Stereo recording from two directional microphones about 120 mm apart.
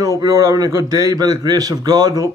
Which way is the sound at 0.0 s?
30° right (ahead or behind).